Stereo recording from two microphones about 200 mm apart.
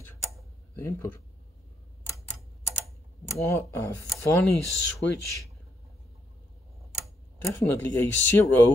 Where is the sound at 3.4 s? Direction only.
15° left (ahead or behind).